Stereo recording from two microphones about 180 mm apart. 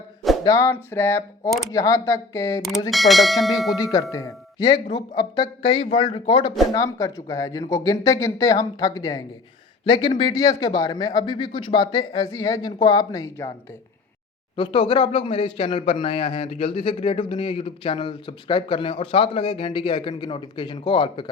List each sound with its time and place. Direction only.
0.4 s speech: 15° left (ahead or behind)
2.9 s speech: centre (ahead or behind)
3.8 s speech: 20° left (ahead or behind)
6.7 s speech: 20° left (ahead or behind)
14.5 s speech: 30° left (ahead or behind)